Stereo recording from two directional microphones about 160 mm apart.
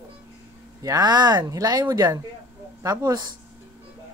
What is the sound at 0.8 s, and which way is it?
Speech, 25° right (ahead or behind).